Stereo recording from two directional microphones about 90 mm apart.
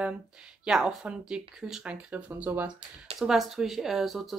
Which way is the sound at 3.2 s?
5° right (ahead or behind).